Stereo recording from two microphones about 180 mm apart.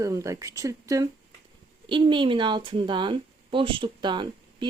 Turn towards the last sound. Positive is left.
turn(degrees=-25)  # may be behind; listen again after turning